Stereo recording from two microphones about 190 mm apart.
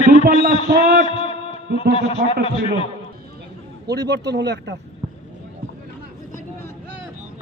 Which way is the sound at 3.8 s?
60° right (ahead or behind).